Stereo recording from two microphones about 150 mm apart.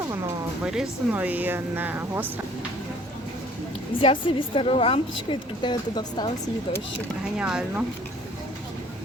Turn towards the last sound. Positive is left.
turn(degrees=-5)  # may be behind; listen again after turning